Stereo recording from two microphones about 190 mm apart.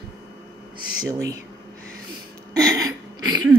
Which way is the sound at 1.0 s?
15° right (ahead or behind).